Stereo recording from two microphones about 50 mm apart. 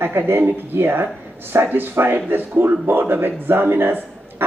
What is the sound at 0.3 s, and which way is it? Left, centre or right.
Speech, right.